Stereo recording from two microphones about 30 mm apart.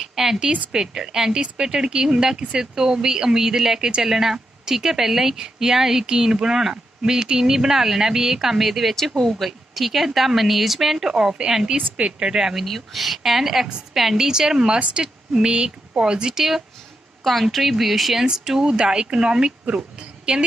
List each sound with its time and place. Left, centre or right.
0.0 s a sound: centre
0.7 s a woman's voice: right
6.7 s a woman's voice: right
12.0 s speech: right
12.6 s a woman's voice: centre
15.3 s speech: right
17.2 s a woman's voice: centre
18.3 s a woman's voice: right